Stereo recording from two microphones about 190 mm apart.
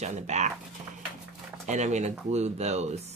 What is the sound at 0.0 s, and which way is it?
Speech, 35° right (ahead or behind).